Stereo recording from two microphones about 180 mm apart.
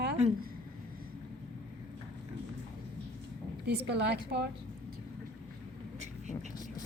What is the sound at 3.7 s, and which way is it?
Speech, 70° right (ahead or behind).